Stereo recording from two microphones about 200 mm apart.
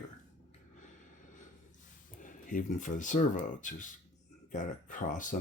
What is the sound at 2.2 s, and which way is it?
Speech, 40° left (ahead or behind).